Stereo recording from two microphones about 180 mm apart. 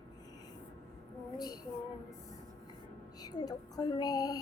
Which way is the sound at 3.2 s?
20° left (ahead or behind).